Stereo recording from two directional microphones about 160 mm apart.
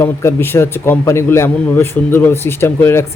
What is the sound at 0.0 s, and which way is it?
A man's voice, 15° left (ahead or behind).